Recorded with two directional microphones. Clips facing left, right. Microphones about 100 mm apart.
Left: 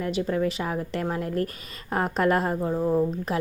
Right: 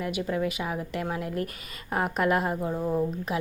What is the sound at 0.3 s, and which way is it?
Speech, 30° left (ahead or behind).